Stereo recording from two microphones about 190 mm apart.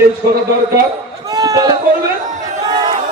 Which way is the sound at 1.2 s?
20° right (ahead or behind).